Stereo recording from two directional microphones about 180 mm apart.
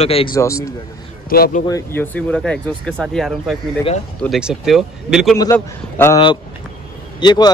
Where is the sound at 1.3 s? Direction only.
55° left (ahead or behind).